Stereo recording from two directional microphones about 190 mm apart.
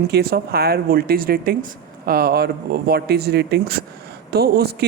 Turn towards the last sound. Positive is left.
turn(degrees=-55)  # may be behind; listen again after turning